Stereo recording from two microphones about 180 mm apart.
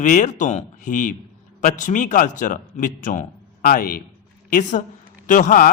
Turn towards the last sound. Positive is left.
turn(degrees=45)  # may be behind; listen again after turning